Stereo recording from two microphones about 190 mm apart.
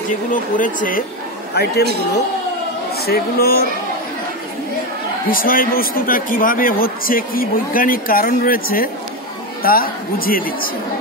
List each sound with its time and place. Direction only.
0.3 s a man's voice: 45° left (ahead or behind)
1.5 s a man's voice: 55° left (ahead or behind)
5.3 s a man's voice: 50° left (ahead or behind)